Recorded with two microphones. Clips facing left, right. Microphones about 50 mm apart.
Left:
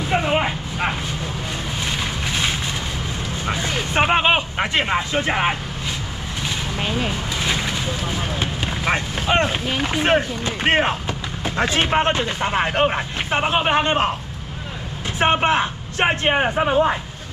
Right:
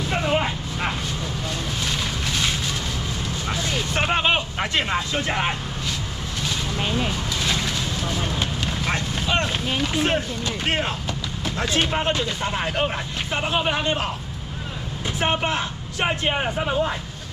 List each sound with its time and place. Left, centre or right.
0.0 s vehicle: centre
3.4 s a sound: left
6.4 s vehicle: left
11.1 s speech: left
15.1 s speech: left